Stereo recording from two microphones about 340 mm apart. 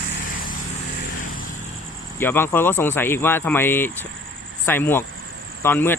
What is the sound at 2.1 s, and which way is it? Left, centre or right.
Speech, centre.